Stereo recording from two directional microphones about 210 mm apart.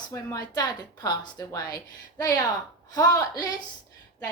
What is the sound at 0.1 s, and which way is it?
A woman's voice, 15° left (ahead or behind).